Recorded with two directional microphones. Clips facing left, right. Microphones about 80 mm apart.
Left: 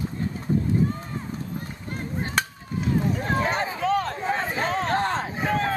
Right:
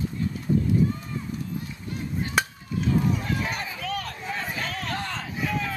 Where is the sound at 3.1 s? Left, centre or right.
Left.